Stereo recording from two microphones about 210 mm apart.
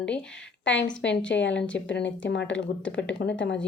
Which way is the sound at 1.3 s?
60° left (ahead or behind).